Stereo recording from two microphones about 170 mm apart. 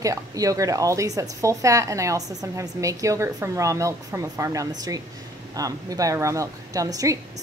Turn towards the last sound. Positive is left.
turn(degrees=-20)  # may be behind; listen again after turning